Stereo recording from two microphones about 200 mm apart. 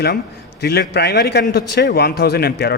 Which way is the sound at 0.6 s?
55° left (ahead or behind).